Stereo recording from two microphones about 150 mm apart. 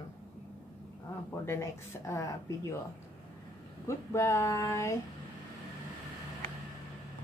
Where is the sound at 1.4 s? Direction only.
20° left (ahead or behind).